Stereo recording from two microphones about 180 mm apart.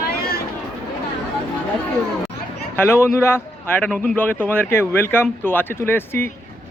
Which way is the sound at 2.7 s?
15° left (ahead or behind).